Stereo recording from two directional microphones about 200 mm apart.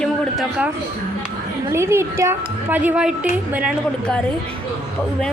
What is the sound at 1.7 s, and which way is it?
A woman's voice, 15° right (ahead or behind).